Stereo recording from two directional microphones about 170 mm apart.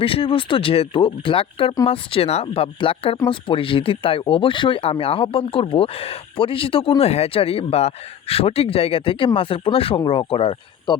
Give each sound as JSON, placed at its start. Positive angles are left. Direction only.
{"t": 0.0, "sound": "speech", "side_deg": 35}